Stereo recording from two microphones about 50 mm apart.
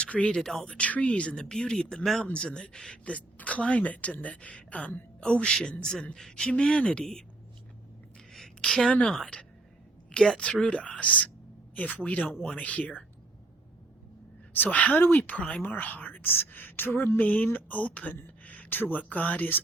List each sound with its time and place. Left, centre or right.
0.0 s speech: left
0.3 s speech: centre
0.8 s a woman's voice: left
1.5 s a woman's voice: centre; by 5.0 s left
5.2 s a woman's voice: centre
8.3 s a sound: centre
9.0 s a woman's voice: centre; by 12.9 s left
14.5 s a woman's voice: left
17.2 s speech: left
18.4 s a sound: left
19.0 s speech: left